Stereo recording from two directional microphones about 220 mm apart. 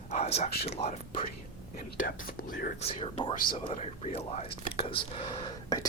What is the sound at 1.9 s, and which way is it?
Speech, 40° left (ahead or behind).